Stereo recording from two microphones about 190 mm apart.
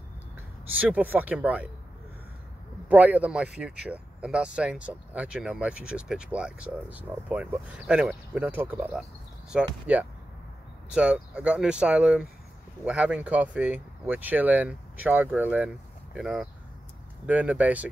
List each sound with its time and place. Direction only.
0.7 s speech: 5° right (ahead or behind)
2.9 s speech: 5° right (ahead or behind)